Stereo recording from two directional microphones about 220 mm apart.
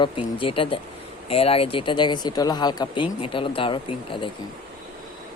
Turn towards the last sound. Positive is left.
turn(degrees=25)  # may be behind; listen again after turning